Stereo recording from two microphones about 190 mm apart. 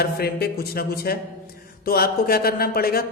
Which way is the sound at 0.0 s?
55° left (ahead or behind).